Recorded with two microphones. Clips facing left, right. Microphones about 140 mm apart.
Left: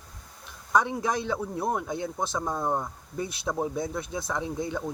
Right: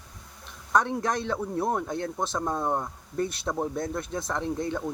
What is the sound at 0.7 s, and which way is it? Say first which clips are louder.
Speech: even; 5° left (ahead or behind).